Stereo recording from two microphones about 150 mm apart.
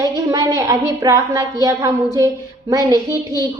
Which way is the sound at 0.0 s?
25° right (ahead or behind).